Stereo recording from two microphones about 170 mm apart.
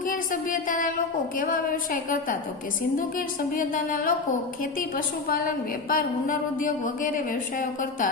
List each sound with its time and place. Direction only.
0.0 s a woman's voice: 55° left (ahead or behind)